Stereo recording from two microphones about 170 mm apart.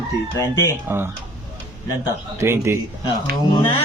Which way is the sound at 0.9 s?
15° right (ahead or behind).